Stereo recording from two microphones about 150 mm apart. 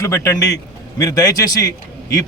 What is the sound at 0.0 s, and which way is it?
A man's voice, 20° left (ahead or behind).